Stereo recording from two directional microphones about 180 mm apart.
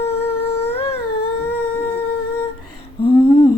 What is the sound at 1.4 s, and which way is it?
Humming, 10° left (ahead or behind).